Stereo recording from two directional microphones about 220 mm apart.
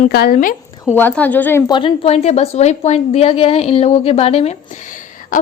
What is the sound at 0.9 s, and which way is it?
A woman's voice, 10° left (ahead or behind).